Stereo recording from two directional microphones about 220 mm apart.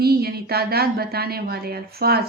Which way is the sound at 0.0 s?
45° right (ahead or behind).